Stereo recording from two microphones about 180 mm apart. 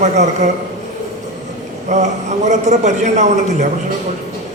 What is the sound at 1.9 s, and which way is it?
A man's voice, 40° right (ahead or behind).